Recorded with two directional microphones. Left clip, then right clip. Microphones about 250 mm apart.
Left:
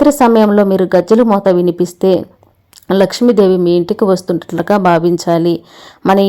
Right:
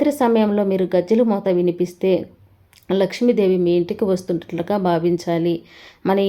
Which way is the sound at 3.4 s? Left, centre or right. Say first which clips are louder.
Left 8 dB; left.